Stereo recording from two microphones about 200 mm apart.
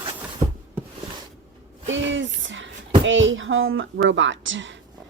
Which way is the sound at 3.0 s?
70° right (ahead or behind).